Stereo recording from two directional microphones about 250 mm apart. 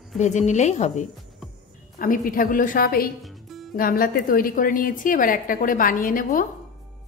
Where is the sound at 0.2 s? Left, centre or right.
Left.